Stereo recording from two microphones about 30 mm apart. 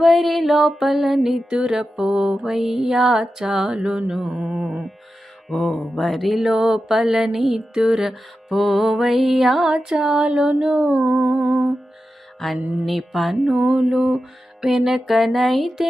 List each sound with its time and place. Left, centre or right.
0.0 s music: centre
1.5 s music: right; by 3.7 s centre
3.7 s music: right
4.2 s music: centre
5.5 s mantra: centre
6.0 s music: centre
6.4 s music: right
7.7 s music: right
8.0 s music: centre
9.6 s music: right
12.5 s music: right
12.8 s music: centre
13.7 s music: centre
14.7 s music: centre